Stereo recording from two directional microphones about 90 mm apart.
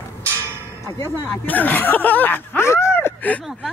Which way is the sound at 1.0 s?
20° left (ahead or behind).